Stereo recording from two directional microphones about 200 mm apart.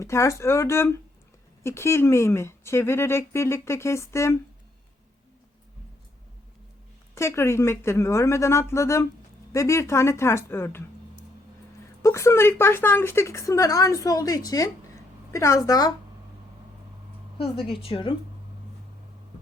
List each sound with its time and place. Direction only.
0.0 s a woman's voice: 15° left (ahead or behind)
7.2 s a woman's voice: 15° left (ahead or behind)
12.0 s a woman's voice: 15° left (ahead or behind)
17.7 s speech: 25° left (ahead or behind)